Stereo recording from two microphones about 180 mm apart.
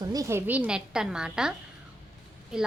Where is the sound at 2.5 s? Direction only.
Centre (ahead or behind).